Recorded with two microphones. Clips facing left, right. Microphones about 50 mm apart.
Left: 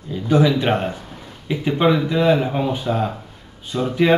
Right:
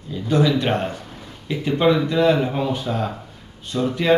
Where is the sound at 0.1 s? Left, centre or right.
Centre.